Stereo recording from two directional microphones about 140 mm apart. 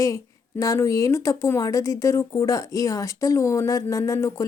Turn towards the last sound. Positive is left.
turn(degrees=20)  # may be behind; listen again after turning